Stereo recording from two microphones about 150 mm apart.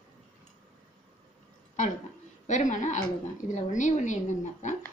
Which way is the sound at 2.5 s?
55° left (ahead or behind).